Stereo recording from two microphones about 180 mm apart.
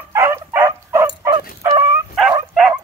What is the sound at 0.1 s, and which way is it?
Dog, 15° right (ahead or behind).